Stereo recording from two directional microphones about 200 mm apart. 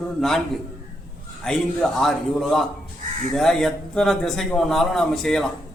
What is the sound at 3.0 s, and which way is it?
Crow, 40° right (ahead or behind).